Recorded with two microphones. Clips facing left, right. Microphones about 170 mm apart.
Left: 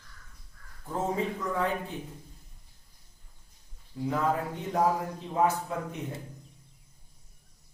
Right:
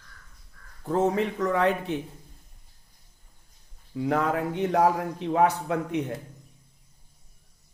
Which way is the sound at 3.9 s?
70° right (ahead or behind).